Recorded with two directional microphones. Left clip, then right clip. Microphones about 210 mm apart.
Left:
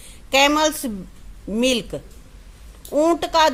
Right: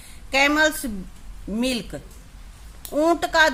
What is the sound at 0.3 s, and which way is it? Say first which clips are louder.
A woman's voice: left 2 dB; 20° left (ahead or behind).